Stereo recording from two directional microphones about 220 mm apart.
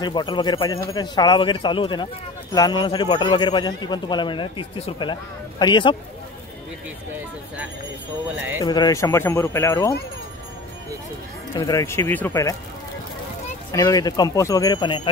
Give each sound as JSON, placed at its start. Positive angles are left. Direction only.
{"t": 0.0, "sound": "a man's voice", "side_deg": 20}
{"t": 8.5, "sound": "speech", "side_deg": 15}
{"t": 11.5, "sound": "speech", "side_deg": 15}
{"t": 13.7, "sound": "speech", "side_deg": 15}